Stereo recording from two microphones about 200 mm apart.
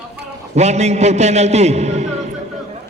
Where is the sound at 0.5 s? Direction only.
35° right (ahead or behind).